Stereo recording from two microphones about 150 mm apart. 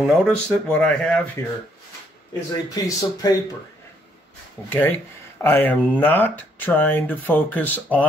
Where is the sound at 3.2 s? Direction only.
25° left (ahead or behind).